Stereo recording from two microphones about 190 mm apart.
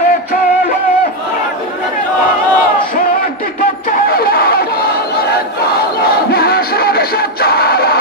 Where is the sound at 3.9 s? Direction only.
50° left (ahead or behind).